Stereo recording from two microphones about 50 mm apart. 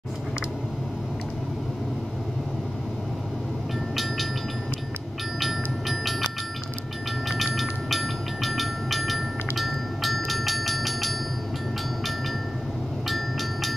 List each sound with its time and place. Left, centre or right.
3.9 s train: centre
5.4 s train: centre
7.2 s train: centre
13.1 s train: centre